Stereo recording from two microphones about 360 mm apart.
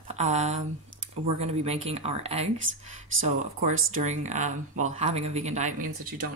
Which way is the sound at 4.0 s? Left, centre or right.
Centre.